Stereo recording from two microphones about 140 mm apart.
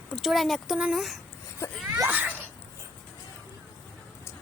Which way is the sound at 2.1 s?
10° right (ahead or behind).